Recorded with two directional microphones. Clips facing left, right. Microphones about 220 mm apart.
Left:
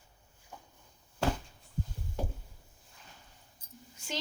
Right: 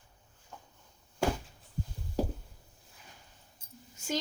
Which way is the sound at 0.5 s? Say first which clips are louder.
Even; 10° left (ahead or behind).